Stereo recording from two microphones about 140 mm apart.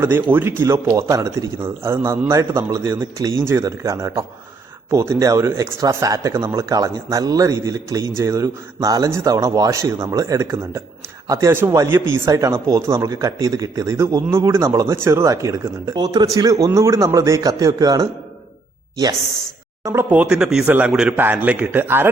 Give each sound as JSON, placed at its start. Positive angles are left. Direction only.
{"t": 0.0, "sound": "speech", "side_deg": -15}
{"t": 19.8, "sound": "speech", "side_deg": -20}